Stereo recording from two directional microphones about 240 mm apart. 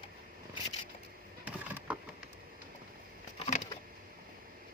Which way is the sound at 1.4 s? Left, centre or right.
Centre.